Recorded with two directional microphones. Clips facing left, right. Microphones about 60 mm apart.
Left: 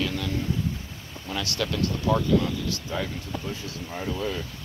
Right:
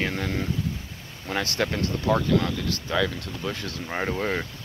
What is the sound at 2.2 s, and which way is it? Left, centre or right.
Speech, right.